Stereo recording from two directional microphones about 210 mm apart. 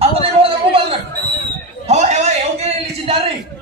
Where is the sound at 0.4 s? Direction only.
25° right (ahead or behind).